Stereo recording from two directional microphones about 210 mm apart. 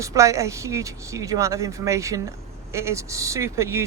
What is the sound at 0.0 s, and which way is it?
A woman's voice, 15° right (ahead or behind).